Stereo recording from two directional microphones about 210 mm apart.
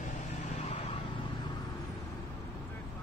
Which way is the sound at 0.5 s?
30° left (ahead or behind).